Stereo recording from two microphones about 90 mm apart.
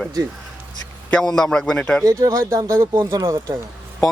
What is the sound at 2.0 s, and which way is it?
Speech, 35° right (ahead or behind).